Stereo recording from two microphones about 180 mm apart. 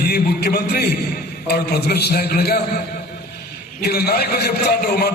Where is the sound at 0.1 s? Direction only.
55° left (ahead or behind).